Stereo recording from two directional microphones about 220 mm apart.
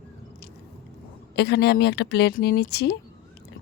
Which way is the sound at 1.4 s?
50° left (ahead or behind).